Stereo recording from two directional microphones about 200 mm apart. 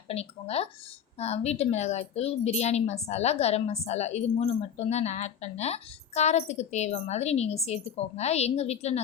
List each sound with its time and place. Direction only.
0.1 s a woman's voice: 30° left (ahead or behind)